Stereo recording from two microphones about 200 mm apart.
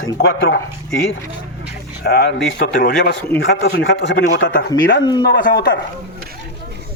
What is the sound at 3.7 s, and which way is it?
Speech, 70° left (ahead or behind).